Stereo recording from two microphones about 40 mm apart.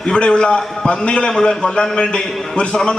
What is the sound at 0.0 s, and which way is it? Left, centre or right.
A man's voice, left.